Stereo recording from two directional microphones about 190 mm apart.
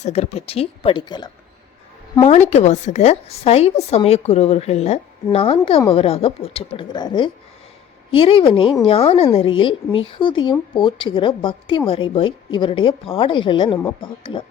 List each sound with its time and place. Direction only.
0.0 s a woman's voice: 35° left (ahead or behind)
2.2 s a woman's voice: 35° left (ahead or behind)